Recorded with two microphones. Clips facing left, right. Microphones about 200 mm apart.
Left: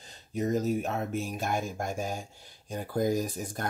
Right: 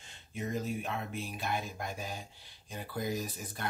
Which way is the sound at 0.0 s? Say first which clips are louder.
Left 8 dB; 40° left (ahead or behind).